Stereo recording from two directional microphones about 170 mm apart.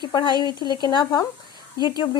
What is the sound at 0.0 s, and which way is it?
A woman's voice, 25° left (ahead or behind).